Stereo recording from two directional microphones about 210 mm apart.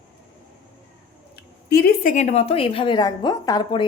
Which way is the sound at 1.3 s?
50° left (ahead or behind).